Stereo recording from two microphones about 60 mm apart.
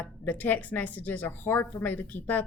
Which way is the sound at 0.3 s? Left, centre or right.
Left.